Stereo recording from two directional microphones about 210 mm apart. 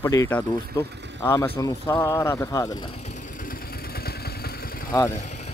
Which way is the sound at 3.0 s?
40° left (ahead or behind).